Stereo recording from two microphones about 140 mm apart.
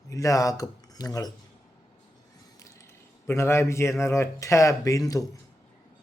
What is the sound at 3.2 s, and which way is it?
Speech, 20° left (ahead or behind).